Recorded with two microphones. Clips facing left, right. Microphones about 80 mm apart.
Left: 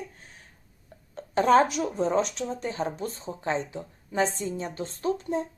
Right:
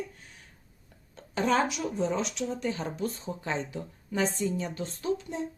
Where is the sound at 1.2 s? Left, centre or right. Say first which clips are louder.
Left 6 dB; left.